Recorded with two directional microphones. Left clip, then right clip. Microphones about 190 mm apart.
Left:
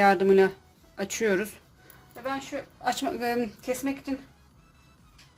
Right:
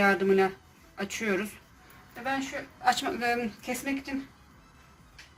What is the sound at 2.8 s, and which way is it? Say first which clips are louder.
Speech: right 2 dB; 50° left (ahead or behind).